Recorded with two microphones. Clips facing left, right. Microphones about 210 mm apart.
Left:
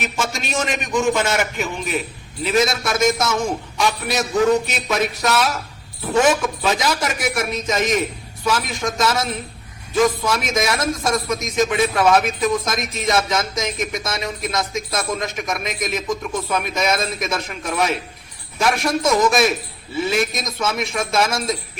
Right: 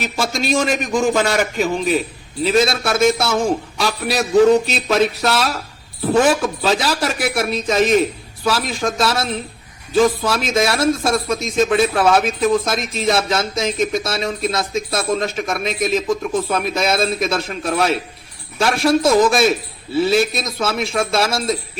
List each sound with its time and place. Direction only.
0.0 s a man's voice: 35° right (ahead or behind)